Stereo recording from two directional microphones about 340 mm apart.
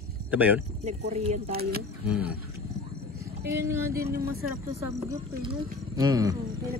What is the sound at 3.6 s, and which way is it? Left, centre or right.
Speech, centre.